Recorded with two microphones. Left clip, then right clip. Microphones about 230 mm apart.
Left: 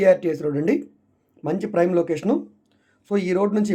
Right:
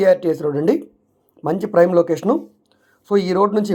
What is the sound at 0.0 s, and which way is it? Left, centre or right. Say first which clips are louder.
Speech: right 2 dB; centre.